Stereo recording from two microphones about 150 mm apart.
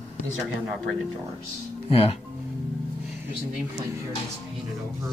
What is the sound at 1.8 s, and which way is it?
Speech, 40° left (ahead or behind).